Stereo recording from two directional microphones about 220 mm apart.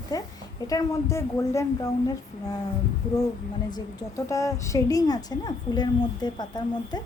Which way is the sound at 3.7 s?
15° left (ahead or behind).